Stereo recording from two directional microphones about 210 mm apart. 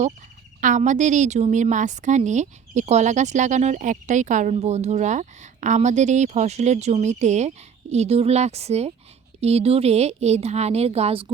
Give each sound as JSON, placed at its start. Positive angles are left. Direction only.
{"t": 0.6, "sound": "a woman's voice", "side_deg": -35}